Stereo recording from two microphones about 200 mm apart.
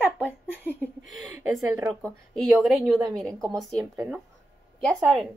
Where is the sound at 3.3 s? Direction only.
15° right (ahead or behind).